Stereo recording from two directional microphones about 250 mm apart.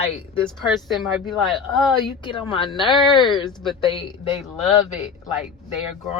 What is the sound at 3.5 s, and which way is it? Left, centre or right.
Speech, centre.